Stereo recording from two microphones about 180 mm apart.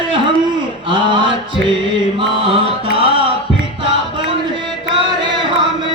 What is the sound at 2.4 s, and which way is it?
Music, 30° right (ahead or behind).